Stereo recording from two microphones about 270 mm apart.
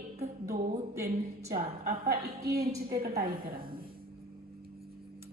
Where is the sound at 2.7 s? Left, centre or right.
Right.